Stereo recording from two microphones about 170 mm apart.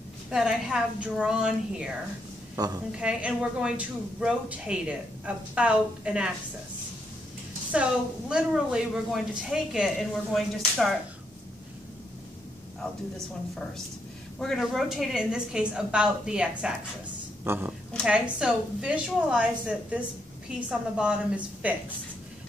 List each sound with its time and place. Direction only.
0.3 s speech: 5° right (ahead or behind)
2.5 s a woman's voice: 20° right (ahead or behind)
3.0 s a woman's voice: 5° right (ahead or behind)
7.7 s speech: 5° right (ahead or behind)
14.4 s a woman's voice: centre (ahead or behind)